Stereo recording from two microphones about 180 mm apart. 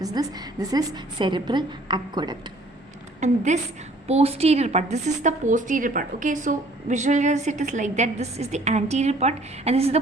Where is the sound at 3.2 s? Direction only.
40° right (ahead or behind).